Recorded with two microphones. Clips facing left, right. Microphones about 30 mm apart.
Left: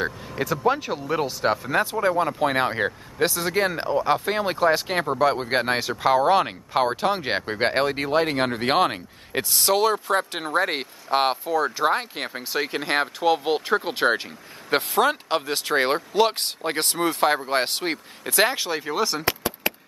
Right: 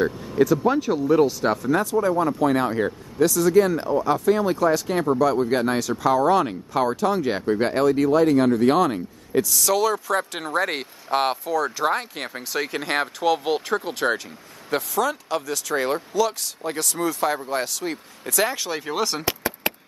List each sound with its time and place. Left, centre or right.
0.7 s speech: centre; by 10.4 s left
10.4 s speech: centre
13.5 s speech: left
14.7 s speech: left
18.2 s speech: left
18.9 s speech: centre